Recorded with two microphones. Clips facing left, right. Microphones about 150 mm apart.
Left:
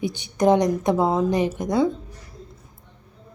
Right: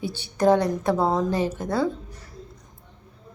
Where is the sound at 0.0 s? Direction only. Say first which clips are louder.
Left 1 dB; 15° left (ahead or behind).